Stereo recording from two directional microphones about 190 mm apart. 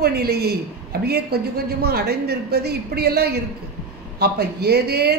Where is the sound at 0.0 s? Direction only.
55° right (ahead or behind).